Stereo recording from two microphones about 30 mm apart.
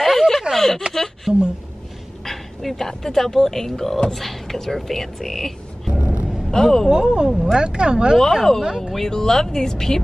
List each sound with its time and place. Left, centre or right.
0.0 s a sound: centre
1.3 s speech: centre
2.2 s speech: centre
5.9 s a sound: right
6.5 s speech: centre
6.9 s speech: right
8.6 s speech: centre
8.9 s speech: centre